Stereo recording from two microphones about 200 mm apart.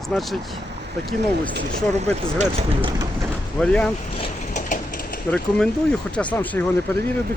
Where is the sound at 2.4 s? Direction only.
30° right (ahead or behind).